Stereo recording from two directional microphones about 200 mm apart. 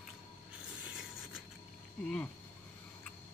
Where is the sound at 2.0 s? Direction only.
5° left (ahead or behind).